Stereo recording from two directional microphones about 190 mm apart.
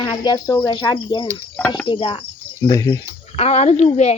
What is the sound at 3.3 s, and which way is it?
Speech, 35° left (ahead or behind).